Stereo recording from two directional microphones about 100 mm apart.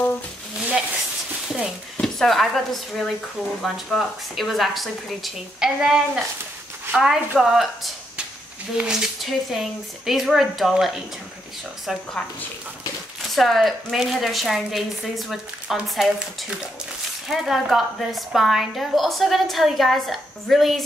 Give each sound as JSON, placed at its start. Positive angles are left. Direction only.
{"t": 2.0, "sound": "a woman's voice", "side_deg": 5}
{"t": 13.3, "sound": "a woman's voice", "side_deg": 0}